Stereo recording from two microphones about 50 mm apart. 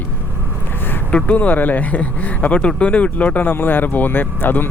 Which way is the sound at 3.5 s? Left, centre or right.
Left.